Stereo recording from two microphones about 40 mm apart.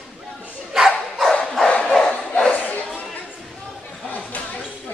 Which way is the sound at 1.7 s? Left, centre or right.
Left.